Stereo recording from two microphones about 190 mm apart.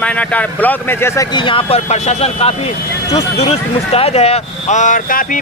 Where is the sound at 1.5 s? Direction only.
30° left (ahead or behind).